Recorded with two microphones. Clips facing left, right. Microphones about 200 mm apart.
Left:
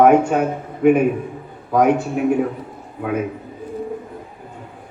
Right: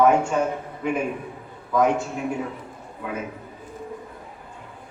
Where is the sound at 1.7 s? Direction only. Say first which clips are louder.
Left 5 dB; 60° left (ahead or behind).